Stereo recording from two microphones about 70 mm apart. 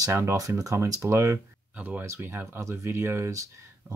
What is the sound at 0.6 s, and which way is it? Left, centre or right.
Speech, right.